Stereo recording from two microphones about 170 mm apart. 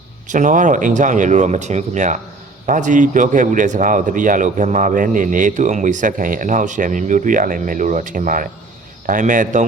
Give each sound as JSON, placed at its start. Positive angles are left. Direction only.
{"t": 0.3, "sound": "speech", "side_deg": -50}